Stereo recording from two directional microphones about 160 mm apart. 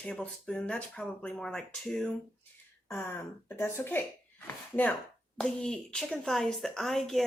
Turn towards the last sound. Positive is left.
turn(degrees=0)  # may be behind; listen again after turning